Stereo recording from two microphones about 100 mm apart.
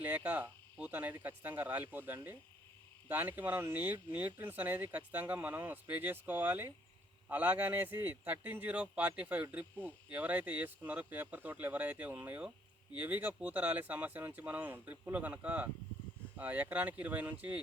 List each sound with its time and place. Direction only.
0.0 s speech: 15° right (ahead or behind)